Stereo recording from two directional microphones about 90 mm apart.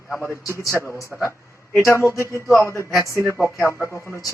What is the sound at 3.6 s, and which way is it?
Speech, 20° left (ahead or behind).